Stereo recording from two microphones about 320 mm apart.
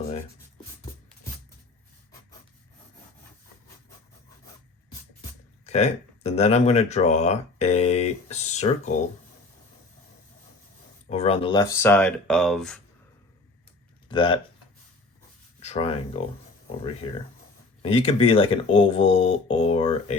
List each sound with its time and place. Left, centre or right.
5.6 s speech: centre
11.1 s speech: centre
14.1 s speech: centre
15.6 s speech: centre